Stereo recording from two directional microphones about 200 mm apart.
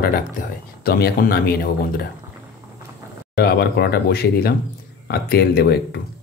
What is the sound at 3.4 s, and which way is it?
Speech, 50° left (ahead or behind).